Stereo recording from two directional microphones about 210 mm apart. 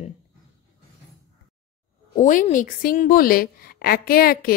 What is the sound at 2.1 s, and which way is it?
A woman's voice, 35° left (ahead or behind).